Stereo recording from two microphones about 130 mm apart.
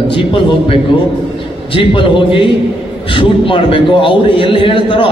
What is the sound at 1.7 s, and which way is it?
A man's voice, 40° left (ahead or behind).